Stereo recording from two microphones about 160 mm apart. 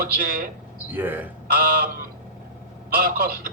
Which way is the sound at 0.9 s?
10° right (ahead or behind).